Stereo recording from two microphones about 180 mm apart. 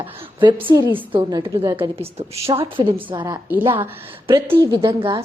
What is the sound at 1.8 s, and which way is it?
A woman's voice, 35° right (ahead or behind).